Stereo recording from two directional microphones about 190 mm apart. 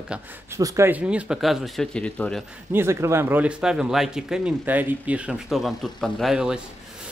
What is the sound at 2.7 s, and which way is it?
Speech, 15° right (ahead or behind).